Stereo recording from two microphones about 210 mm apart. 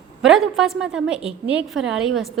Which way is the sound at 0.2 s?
Centre (ahead or behind).